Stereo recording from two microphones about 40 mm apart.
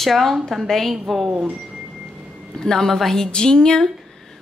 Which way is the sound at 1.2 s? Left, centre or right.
Right.